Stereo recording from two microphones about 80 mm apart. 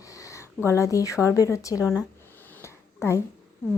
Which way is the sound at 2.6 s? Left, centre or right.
Left.